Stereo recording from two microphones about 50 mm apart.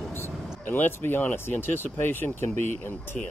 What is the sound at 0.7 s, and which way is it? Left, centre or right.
Speech, left.